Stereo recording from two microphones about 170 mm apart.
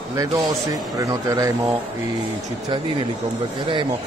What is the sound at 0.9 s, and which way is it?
Speech, 20° right (ahead or behind).